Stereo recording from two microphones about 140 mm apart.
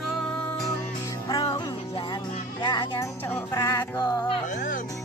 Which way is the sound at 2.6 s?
35° left (ahead or behind).